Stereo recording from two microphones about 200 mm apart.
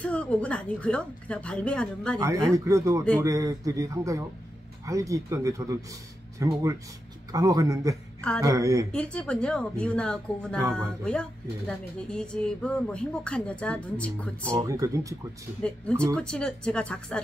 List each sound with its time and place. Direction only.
0.0 s speech: 5° left (ahead or behind)
2.5 s speech: 15° right (ahead or behind)
8.9 s speech: 5° left (ahead or behind)
14.5 s speech: 15° right (ahead or behind)
15.6 s speech: 5° left (ahead or behind)